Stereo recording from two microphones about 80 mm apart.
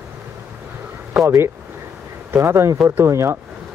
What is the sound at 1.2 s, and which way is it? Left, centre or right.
Speech, right.